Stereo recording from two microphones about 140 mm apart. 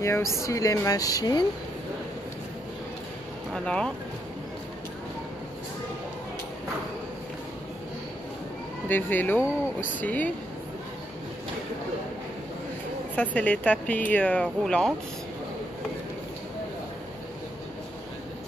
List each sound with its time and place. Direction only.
0.0 s speech: 20° left (ahead or behind)
3.5 s speech: 5° left (ahead or behind)
8.8 s speech: 15° left (ahead or behind)
13.1 s speech: 10° left (ahead or behind)